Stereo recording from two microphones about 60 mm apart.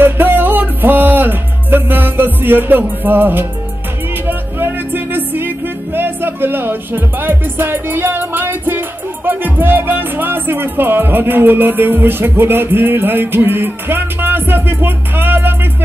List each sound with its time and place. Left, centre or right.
0.0 s music: right
5.9 s speech: right